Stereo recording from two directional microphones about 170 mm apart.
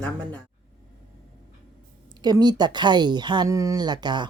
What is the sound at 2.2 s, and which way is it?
A woman's voice, 25° right (ahead or behind).